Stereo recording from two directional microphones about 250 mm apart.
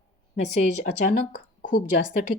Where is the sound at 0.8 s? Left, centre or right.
Left.